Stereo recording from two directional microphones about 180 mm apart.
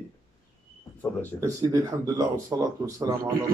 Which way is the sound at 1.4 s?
20° right (ahead or behind).